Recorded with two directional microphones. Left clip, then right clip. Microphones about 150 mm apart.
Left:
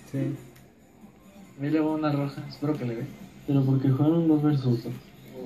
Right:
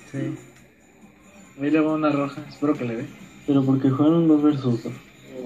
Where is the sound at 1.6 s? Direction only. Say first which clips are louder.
Right 5 dB; 50° right (ahead or behind).